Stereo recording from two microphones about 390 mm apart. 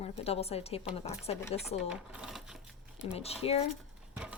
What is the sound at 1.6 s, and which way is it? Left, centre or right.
Speech, centre.